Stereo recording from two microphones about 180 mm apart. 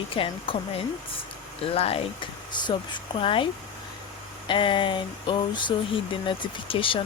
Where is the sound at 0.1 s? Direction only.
30° left (ahead or behind).